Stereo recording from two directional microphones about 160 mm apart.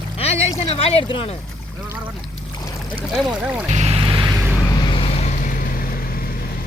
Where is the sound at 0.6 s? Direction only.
35° left (ahead or behind).